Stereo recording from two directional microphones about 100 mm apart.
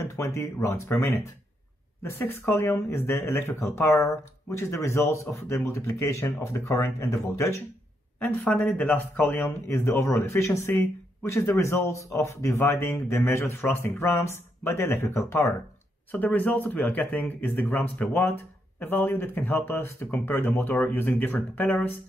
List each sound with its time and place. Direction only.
0.1 s speech: 30° left (ahead or behind)
2.0 s speech: 25° left (ahead or behind)